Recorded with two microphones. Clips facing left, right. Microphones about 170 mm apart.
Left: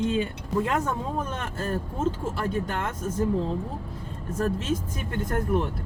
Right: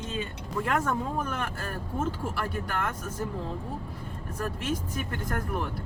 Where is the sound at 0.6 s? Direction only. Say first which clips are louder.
Right 1 dB; 20° left (ahead or behind).